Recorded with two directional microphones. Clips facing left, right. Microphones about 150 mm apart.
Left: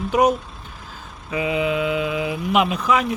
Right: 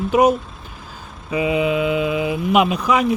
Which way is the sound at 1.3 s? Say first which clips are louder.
Right 3 dB; 20° right (ahead or behind).